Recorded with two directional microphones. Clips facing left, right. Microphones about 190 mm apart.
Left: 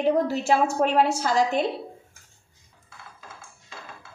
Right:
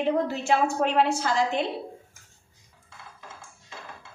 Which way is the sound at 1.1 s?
40° left (ahead or behind).